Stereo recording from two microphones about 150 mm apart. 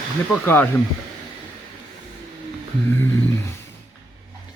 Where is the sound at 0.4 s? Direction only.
15° left (ahead or behind).